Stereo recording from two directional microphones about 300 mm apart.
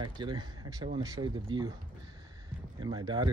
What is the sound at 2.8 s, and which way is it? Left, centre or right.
Speech, centre.